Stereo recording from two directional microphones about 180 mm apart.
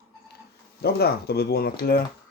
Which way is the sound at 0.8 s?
60° left (ahead or behind).